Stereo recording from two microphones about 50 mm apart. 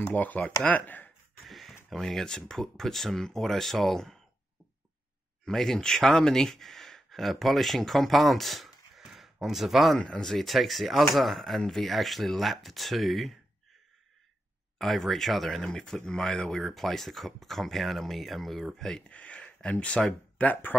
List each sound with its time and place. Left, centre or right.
0.0 s speech: left
1.4 s a sound: centre
1.9 s speech: centre
5.4 s speech: centre
9.9 s speech: centre
10.2 s speech: centre
14.8 s speech: centre
15.7 s speech: centre
19.0 s speech: left